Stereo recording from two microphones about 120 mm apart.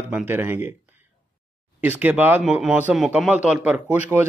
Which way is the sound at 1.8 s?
15° right (ahead or behind).